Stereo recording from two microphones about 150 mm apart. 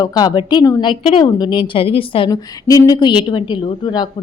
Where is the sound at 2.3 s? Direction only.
25° left (ahead or behind).